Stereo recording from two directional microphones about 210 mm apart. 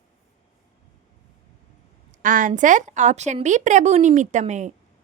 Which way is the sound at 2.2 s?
40° right (ahead or behind).